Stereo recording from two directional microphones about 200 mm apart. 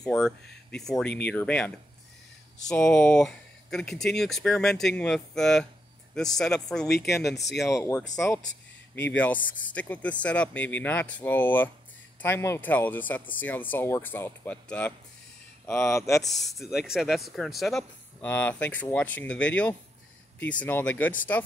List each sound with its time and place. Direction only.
0.0 s speech: 5° left (ahead or behind)
2.7 s speech: 5° left (ahead or behind)
6.9 s speech: 55° left (ahead or behind)
7.6 s speech: 15° left (ahead or behind)
9.0 s speech: 10° left (ahead or behind)
16.2 s speech: centre (ahead or behind)